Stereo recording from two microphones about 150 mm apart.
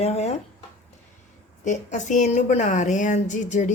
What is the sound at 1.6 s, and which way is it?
Speech, 55° left (ahead or behind).